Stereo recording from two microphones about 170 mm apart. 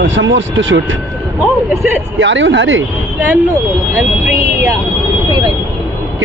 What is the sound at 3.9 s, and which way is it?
Speech, 15° right (ahead or behind).